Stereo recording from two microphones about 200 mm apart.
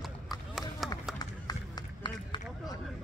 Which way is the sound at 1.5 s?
20° left (ahead or behind).